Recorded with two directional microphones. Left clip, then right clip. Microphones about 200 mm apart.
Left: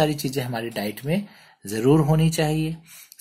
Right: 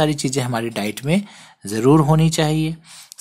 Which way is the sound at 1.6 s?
25° right (ahead or behind).